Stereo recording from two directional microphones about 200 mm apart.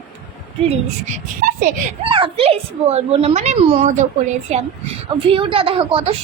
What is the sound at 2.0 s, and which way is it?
Speech, 25° right (ahead or behind).